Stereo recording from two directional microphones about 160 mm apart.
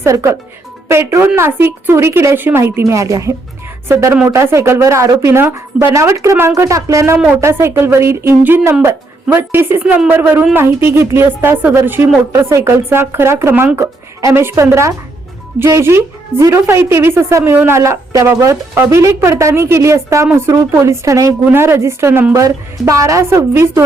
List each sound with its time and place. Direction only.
0.0 s a woman's voice: 15° right (ahead or behind)